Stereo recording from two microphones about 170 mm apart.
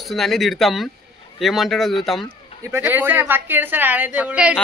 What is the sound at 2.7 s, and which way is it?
A woman's voice, 15° right (ahead or behind).